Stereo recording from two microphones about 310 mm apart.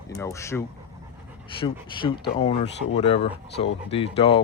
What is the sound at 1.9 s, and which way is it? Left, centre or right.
Speech, centre.